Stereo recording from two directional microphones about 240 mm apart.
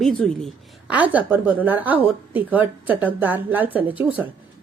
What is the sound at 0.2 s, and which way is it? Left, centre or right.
A woman's voice, centre.